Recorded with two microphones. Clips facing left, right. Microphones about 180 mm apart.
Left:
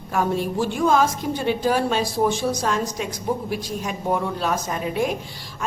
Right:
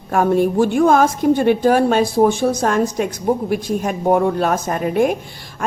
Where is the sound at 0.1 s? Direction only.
55° right (ahead or behind).